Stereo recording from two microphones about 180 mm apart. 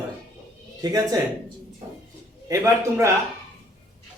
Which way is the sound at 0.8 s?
20° right (ahead or behind).